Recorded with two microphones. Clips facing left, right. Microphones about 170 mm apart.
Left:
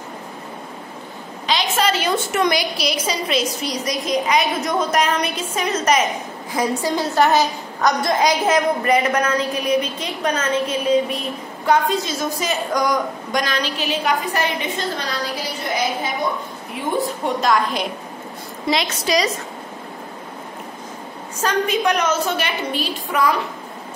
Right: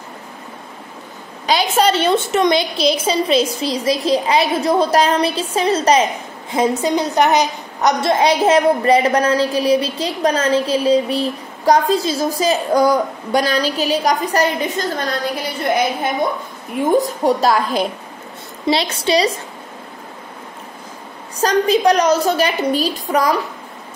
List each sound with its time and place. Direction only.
1.5 s a woman's voice: 35° right (ahead or behind)
6.8 s a woman's voice: 20° right (ahead or behind); by 16.1 s 55° right (ahead or behind)
16.7 s a woman's voice: 40° right (ahead or behind)
21.4 s a woman's voice: 35° right (ahead or behind)